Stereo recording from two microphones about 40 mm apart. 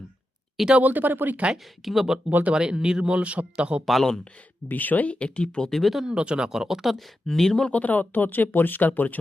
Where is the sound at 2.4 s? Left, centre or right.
Right.